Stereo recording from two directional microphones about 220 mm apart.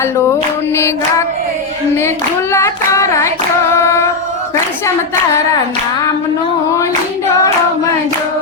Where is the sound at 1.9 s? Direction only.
10° left (ahead or behind).